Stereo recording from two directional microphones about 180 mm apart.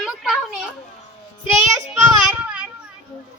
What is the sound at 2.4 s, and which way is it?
Children playing, 5° right (ahead or behind).